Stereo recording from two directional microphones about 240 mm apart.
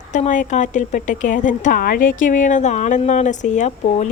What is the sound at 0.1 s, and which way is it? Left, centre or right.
A woman's voice, left.